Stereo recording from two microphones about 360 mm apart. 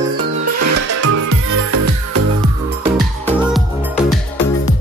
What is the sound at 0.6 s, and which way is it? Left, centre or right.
Music, right.